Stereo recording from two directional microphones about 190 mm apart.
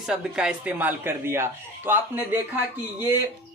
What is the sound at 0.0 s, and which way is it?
Speech, 5° right (ahead or behind).